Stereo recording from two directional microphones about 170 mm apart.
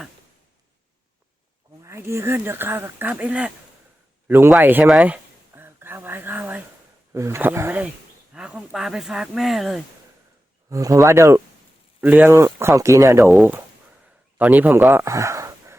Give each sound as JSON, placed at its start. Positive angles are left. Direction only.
{"t": 1.8, "sound": "speech", "side_deg": -15}
{"t": 4.3, "sound": "a sound", "side_deg": -15}
{"t": 7.1, "sound": "speech", "side_deg": -15}
{"t": 10.7, "sound": "speech", "side_deg": -20}
{"t": 13.3, "sound": "speech", "side_deg": -5}